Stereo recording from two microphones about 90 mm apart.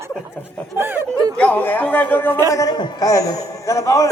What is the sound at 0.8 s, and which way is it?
Speech, 25° right (ahead or behind).